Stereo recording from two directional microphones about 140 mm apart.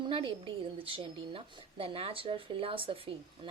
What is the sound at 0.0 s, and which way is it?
A woman's voice, 35° right (ahead or behind).